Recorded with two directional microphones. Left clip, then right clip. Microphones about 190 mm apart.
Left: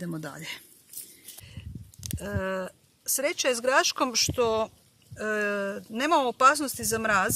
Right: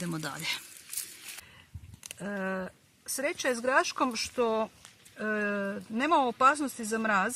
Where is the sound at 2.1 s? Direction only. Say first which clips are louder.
Left 3 dB; 25° left (ahead or behind).